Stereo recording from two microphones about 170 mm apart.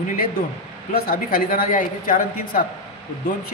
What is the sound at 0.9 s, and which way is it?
A woman's voice, 55° left (ahead or behind).